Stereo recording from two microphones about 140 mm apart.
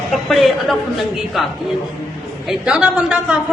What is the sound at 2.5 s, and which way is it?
Speech, 5° right (ahead or behind).